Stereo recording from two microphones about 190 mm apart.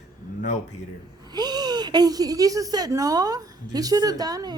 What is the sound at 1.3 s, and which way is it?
Speech, 20° right (ahead or behind).